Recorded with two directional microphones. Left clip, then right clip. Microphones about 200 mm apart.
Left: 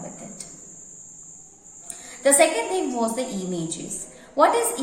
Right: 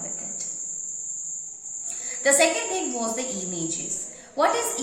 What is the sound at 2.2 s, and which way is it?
A woman's voice, 15° left (ahead or behind).